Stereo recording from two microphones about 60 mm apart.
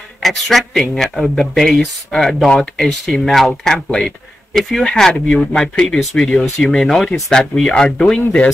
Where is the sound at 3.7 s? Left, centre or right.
Centre.